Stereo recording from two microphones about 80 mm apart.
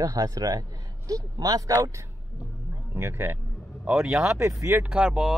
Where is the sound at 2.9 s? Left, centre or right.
Right.